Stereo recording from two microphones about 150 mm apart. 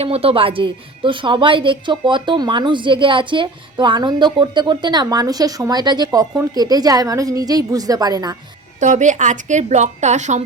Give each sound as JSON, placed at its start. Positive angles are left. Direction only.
{"t": 0.0, "sound": "speech", "side_deg": -40}
{"t": 8.8, "sound": "a woman's voice", "side_deg": -55}